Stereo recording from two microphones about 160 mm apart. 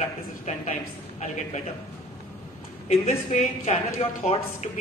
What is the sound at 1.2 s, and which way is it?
Speech, 50° left (ahead or behind).